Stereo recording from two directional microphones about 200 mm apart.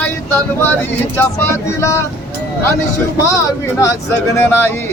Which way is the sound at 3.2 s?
15° left (ahead or behind).